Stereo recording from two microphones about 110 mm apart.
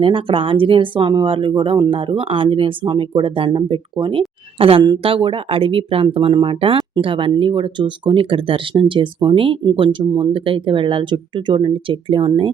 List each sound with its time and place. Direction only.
0.0 s a woman's voice: 50° right (ahead or behind)